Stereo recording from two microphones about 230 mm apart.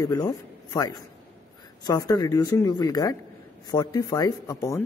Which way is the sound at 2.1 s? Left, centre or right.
Centre.